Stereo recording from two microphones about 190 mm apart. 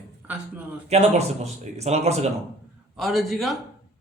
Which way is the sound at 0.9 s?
35° right (ahead or behind).